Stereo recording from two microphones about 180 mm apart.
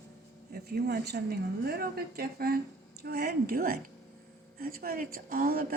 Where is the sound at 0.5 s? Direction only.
60° right (ahead or behind).